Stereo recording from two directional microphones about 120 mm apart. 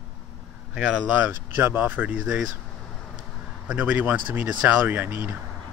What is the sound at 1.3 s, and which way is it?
Speech, 20° right (ahead or behind).